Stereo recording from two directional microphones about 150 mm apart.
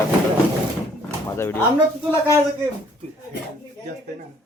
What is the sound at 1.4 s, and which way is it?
Speech, 15° left (ahead or behind).